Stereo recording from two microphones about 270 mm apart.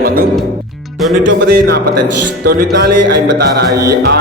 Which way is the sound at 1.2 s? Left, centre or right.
Right.